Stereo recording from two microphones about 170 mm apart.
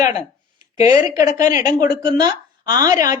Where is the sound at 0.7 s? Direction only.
20° right (ahead or behind).